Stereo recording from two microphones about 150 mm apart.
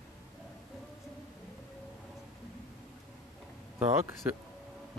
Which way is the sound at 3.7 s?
15° right (ahead or behind).